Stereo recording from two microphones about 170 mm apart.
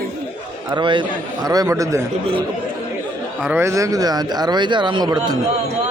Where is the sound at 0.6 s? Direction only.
25° right (ahead or behind).